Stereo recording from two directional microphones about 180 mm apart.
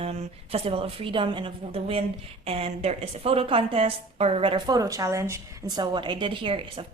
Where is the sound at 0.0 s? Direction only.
35° right (ahead or behind).